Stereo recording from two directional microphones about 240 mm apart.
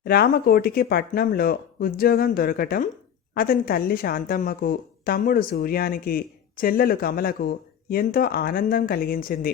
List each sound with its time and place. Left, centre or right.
0.0 s a woman's voice: left